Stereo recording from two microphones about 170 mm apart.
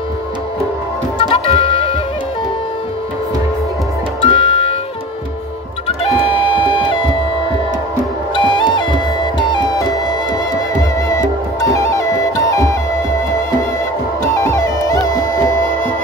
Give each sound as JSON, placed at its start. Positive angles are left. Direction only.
{"t": 1.1, "sound": "music", "side_deg": 35}
{"t": 4.2, "sound": "music", "side_deg": 30}
{"t": 5.9, "sound": "music", "side_deg": 30}
{"t": 8.4, "sound": "music", "side_deg": 30}
{"t": 11.7, "sound": "music", "side_deg": 20}
{"t": 14.3, "sound": "music", "side_deg": 15}